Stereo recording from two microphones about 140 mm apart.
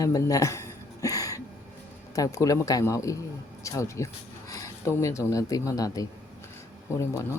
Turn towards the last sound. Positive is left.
turn(degrees=20)  # may be behind; listen again after turning